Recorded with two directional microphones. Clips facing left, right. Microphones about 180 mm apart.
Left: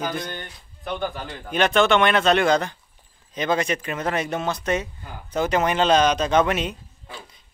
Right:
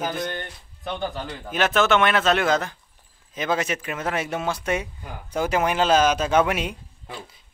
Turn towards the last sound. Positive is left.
turn(degrees=-10)  # may be behind; listen again after turning